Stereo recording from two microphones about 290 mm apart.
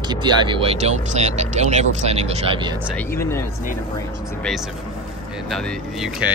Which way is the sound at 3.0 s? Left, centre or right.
Centre.